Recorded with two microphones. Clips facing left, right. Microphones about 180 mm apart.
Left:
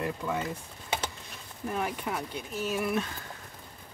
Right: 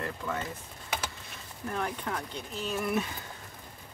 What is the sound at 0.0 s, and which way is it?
Speech, 15° left (ahead or behind).